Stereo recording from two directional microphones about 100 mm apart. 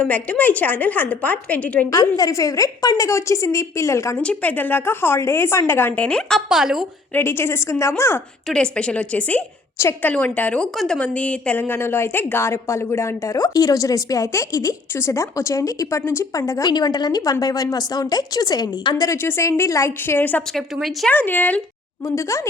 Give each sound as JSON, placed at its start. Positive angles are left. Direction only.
{"t": 0.0, "sound": "a woman's voice", "side_deg": 15}
{"t": 1.9, "sound": "a woman's voice", "side_deg": 40}
{"t": 4.2, "sound": "a woman's voice", "side_deg": 15}
{"t": 6.5, "sound": "speech", "side_deg": -5}
{"t": 7.1, "sound": "a woman's voice", "side_deg": 25}
{"t": 8.4, "sound": "a woman's voice", "side_deg": 10}
{"t": 9.7, "sound": "a woman's voice", "side_deg": 25}
{"t": 10.1, "sound": "a woman's voice", "side_deg": 15}
{"t": 16.6, "sound": "a woman's voice", "side_deg": 45}
{"t": 19.1, "sound": "a woman's voice", "side_deg": 25}
{"t": 20.7, "sound": "speech", "side_deg": 0}
{"t": 21.1, "sound": "a woman's voice", "side_deg": 15}
{"t": 22.0, "sound": "a woman's voice", "side_deg": 30}